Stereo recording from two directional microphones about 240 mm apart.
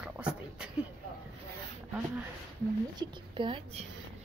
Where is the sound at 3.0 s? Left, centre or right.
Right.